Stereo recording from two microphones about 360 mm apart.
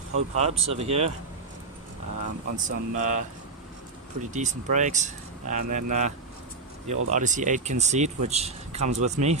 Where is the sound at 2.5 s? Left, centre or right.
Right.